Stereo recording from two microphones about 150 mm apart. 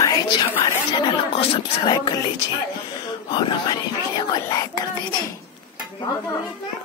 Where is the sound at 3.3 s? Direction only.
30° left (ahead or behind).